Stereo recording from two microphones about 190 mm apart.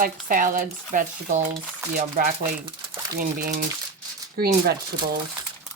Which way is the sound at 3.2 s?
55° right (ahead or behind).